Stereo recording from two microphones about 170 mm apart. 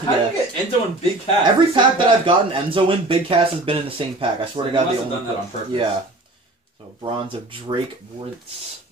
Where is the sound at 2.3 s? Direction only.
30° right (ahead or behind).